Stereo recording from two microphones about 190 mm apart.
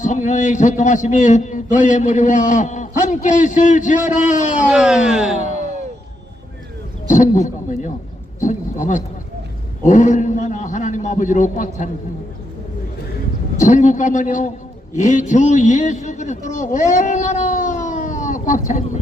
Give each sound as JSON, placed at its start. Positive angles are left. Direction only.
{"t": 0.0, "sound": "a man's voice", "side_deg": 40}
{"t": 4.7, "sound": "a sound", "side_deg": -5}
{"t": 7.1, "sound": "a man's voice", "side_deg": 40}
{"t": 13.6, "sound": "a man's voice", "side_deg": 40}